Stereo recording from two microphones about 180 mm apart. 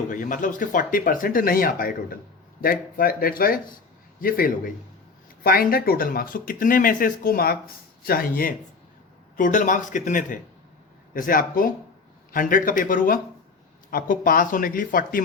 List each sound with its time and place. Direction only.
0.1 s speech: 45° left (ahead or behind)